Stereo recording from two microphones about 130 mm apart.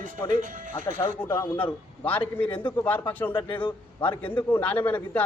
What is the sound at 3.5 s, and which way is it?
Speech, 40° left (ahead or behind).